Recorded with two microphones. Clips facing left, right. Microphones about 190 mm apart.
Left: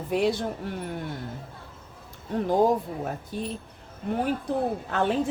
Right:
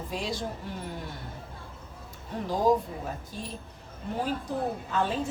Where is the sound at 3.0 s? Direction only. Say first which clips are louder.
Left 6 dB; 60° left (ahead or behind).